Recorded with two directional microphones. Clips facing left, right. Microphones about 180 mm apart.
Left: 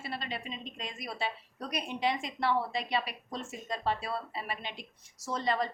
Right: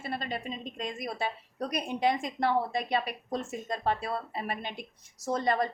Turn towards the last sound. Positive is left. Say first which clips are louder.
# right 4 dB
turn(degrees=-50)  # may be behind; listen again after turning